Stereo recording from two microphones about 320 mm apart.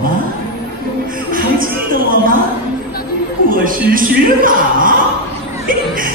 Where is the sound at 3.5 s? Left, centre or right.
Right.